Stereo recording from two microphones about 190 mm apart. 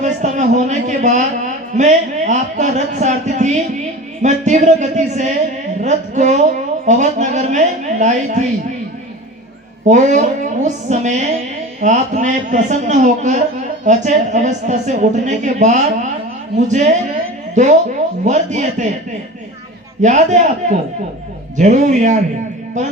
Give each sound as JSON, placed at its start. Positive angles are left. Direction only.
{"t": 0.0, "sound": "a man's voice", "side_deg": -40}
{"t": 9.8, "sound": "a man's voice", "side_deg": -40}
{"t": 20.0, "sound": "a man's voice", "side_deg": -40}